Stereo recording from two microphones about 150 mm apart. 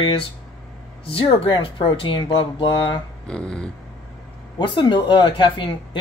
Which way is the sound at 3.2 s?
5° left (ahead or behind).